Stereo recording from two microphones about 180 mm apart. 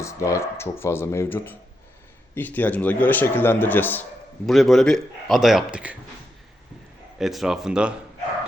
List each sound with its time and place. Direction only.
0.0 s a man's voice: 15° left (ahead or behind); by 6.0 s 5° right (ahead or behind)
7.2 s a man's voice: centre (ahead or behind)